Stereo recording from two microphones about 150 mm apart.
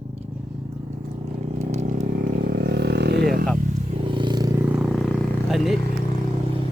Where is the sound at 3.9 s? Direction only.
35° right (ahead or behind).